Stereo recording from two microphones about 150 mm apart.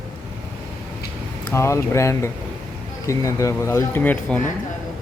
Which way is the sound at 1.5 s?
20° left (ahead or behind).